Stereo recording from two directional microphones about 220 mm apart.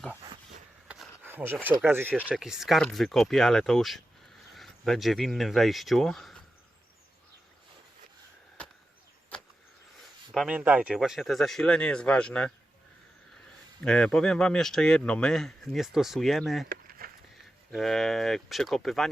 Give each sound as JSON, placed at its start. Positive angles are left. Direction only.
{"t": 0.9, "sound": "a sound", "side_deg": -5}
{"t": 1.6, "sound": "speech", "side_deg": -10}
{"t": 10.3, "sound": "speech", "side_deg": -5}
{"t": 13.8, "sound": "speech", "side_deg": 5}
{"t": 16.6, "sound": "a sound", "side_deg": -40}
{"t": 17.7, "sound": "speech", "side_deg": 0}